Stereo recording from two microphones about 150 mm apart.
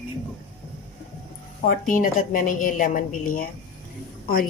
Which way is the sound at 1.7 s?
65° left (ahead or behind).